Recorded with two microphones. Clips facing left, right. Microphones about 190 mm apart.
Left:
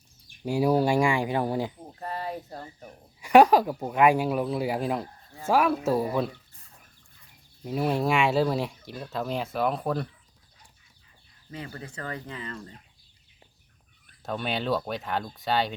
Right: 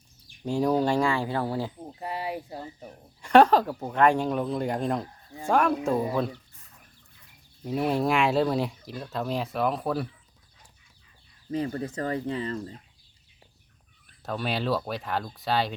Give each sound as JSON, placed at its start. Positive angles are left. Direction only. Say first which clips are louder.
{"t": 0.4, "sound": "speech", "louder": "left 1 dB", "side_deg": 10}
{"t": 1.8, "sound": "speech", "louder": "right 1 dB", "side_deg": -10}
{"t": 3.2, "sound": "speech", "louder": "left 1 dB", "side_deg": 10}
{"t": 7.6, "sound": "speech", "louder": "right 1 dB", "side_deg": 0}
{"t": 11.5, "sound": "speech", "louder": "right 10 dB", "side_deg": -35}
{"t": 14.2, "sound": "speech", "louder": "right 1 dB", "side_deg": 0}